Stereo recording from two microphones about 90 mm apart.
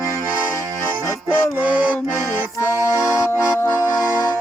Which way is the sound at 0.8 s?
30° left (ahead or behind).